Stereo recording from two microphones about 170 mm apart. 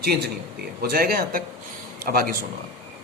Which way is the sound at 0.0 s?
70° right (ahead or behind).